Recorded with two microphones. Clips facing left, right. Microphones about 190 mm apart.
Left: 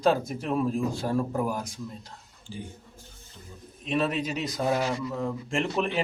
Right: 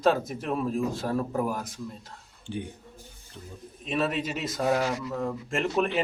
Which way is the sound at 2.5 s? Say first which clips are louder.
Right 5 dB; 65° right (ahead or behind).